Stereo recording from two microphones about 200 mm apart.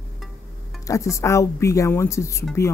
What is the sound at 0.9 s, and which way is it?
Speech, 15° left (ahead or behind).